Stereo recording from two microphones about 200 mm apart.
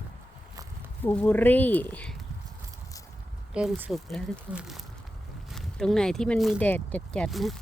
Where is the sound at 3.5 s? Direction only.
5° right (ahead or behind).